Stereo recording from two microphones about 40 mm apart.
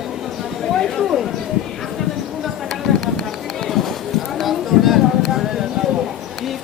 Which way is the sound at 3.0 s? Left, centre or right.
Centre.